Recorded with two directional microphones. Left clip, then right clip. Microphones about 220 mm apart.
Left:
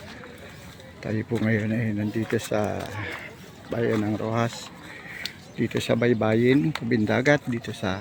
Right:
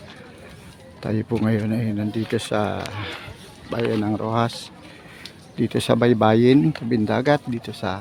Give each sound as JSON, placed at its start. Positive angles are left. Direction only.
{"t": 1.0, "sound": "speech", "side_deg": -15}
{"t": 6.9, "sound": "speech", "side_deg": -10}